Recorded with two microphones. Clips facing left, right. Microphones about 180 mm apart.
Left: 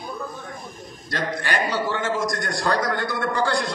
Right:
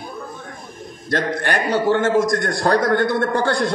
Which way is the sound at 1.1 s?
55° right (ahead or behind).